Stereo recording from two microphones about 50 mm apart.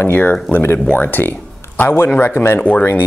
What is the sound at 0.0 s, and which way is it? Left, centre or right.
Speech, left.